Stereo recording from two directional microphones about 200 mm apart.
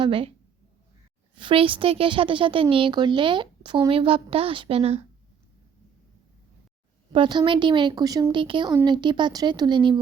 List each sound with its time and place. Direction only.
0.0 s speech: 25° right (ahead or behind)
1.4 s speech: 25° right (ahead or behind)
7.1 s speech: 25° right (ahead or behind)